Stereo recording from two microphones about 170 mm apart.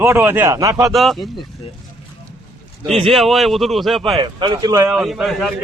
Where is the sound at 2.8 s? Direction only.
35° right (ahead or behind).